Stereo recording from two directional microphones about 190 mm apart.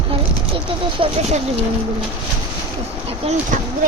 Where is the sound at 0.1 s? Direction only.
30° right (ahead or behind).